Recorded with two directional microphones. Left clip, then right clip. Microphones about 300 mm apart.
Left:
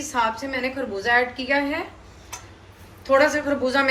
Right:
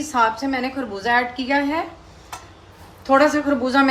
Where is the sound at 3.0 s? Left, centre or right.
Right.